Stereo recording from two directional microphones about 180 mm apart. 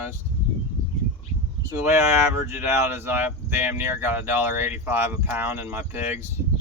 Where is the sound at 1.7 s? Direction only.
15° right (ahead or behind).